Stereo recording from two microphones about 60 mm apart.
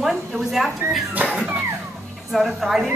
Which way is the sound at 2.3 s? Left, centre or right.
Centre.